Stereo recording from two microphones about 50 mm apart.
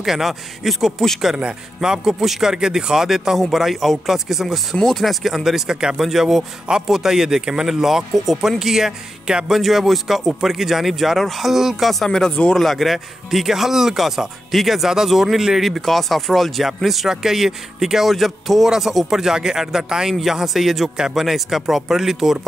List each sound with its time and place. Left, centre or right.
0.0 s speech: centre
1.3 s speech: centre
4.7 s speech: centre
5.2 s speech: centre
9.6 s speech: centre
12.1 s speech: centre
12.5 s speech: centre